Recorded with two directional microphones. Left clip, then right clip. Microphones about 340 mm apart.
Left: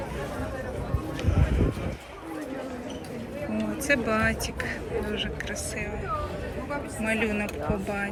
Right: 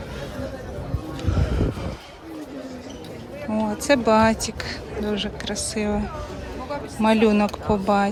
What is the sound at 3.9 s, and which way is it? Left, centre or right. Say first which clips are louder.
Speech: right 7 dB; centre.